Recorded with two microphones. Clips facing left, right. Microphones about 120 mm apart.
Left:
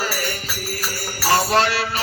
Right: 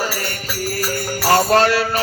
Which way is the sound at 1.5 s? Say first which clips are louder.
Right 4 dB; 45° right (ahead or behind).